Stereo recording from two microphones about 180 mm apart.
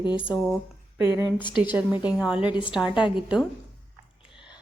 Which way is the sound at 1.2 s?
10° right (ahead or behind).